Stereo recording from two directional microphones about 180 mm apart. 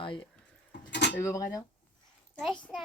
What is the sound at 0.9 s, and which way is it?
Dishes, 75° left (ahead or behind).